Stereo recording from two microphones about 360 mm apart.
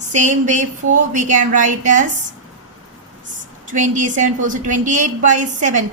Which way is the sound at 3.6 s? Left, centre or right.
Right.